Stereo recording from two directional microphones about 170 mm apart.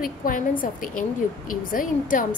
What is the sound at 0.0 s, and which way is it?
A woman's voice, 55° left (ahead or behind).